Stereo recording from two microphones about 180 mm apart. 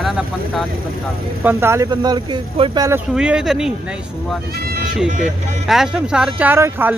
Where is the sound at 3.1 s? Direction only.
5° right (ahead or behind).